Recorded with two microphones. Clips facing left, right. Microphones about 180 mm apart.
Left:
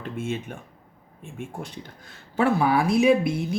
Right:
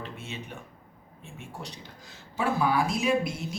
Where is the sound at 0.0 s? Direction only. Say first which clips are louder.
Left 9 dB; 50° left (ahead or behind).